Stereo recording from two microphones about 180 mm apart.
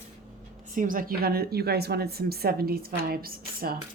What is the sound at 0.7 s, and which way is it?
A woman's voice, 50° right (ahead or behind).